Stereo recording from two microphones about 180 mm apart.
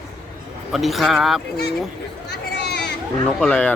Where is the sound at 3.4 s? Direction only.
5° left (ahead or behind).